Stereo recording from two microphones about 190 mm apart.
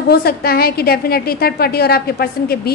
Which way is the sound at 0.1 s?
55° left (ahead or behind).